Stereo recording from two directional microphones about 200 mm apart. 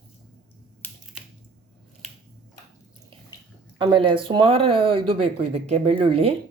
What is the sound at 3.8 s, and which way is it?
Speech, 25° right (ahead or behind).